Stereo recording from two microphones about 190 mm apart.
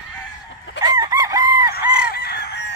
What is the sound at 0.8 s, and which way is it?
Chicken, 20° right (ahead or behind).